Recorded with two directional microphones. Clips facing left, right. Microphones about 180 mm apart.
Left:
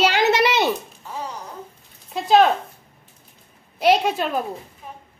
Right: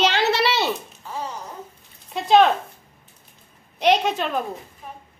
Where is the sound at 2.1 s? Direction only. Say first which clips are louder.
Even; centre (ahead or behind).